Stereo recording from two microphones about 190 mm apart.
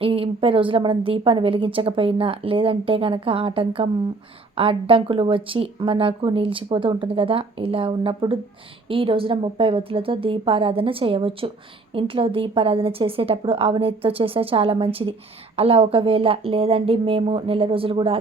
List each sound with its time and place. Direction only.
0.0 s a woman's voice: 30° right (ahead or behind)